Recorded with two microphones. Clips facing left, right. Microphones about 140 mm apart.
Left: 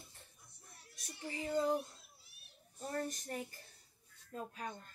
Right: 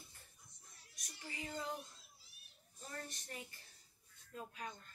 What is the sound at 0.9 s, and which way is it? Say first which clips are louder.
Speech: left 7 dB; 30° left (ahead or behind).